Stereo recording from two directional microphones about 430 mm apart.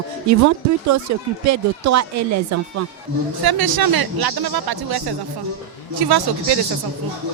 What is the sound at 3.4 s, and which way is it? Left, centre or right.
Speech, right.